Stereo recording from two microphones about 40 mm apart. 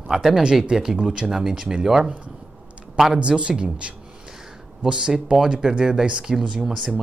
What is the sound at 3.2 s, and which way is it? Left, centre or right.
Speech, right.